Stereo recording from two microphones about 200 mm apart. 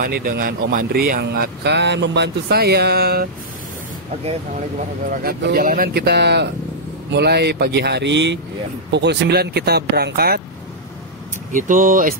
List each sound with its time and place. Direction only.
0.0 s speech: 45° right (ahead or behind)
5.2 s speech: 50° right (ahead or behind)
11.5 s speech: 40° right (ahead or behind)